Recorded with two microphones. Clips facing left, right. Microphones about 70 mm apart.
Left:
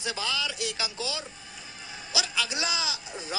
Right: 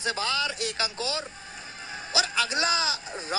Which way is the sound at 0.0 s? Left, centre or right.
Right.